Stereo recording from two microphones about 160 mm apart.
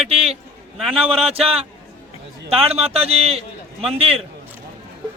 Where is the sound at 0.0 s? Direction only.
40° right (ahead or behind).